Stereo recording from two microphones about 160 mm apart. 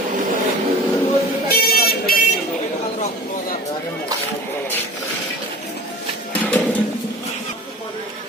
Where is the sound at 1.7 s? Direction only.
75° left (ahead or behind).